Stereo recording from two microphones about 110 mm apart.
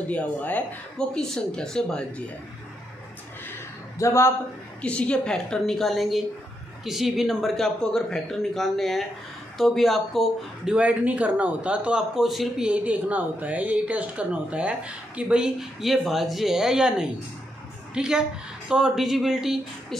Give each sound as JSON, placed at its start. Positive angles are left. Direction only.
{"t": 0.1, "sound": "speech", "side_deg": 15}
{"t": 4.0, "sound": "a man's voice", "side_deg": 25}
{"t": 4.8, "sound": "a man's voice", "side_deg": 10}